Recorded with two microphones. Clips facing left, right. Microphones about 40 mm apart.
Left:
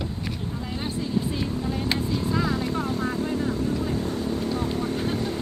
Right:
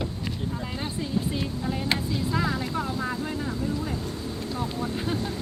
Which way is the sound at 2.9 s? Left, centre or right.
Right.